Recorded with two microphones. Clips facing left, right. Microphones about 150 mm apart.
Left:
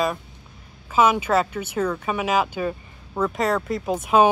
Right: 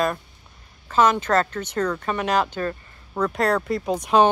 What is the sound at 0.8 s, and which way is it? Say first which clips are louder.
Speech: even; 5° left (ahead or behind).